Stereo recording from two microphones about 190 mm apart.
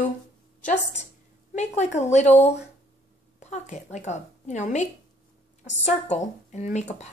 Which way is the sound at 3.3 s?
40° left (ahead or behind).